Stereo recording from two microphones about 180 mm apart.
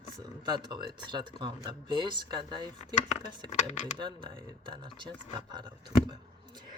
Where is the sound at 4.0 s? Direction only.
25° right (ahead or behind).